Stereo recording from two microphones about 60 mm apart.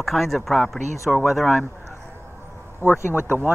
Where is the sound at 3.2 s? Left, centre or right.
Right.